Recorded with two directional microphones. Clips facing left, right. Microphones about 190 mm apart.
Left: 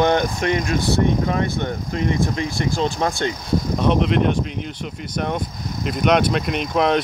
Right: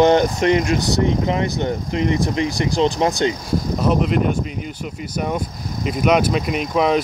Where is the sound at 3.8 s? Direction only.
5° right (ahead or behind).